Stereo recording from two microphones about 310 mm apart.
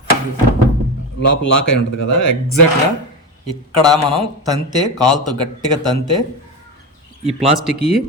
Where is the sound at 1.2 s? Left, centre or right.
Left.